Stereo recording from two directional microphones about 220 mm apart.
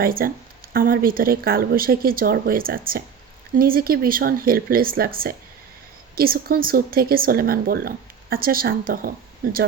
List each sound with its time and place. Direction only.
0.0 s speech: 40° right (ahead or behind)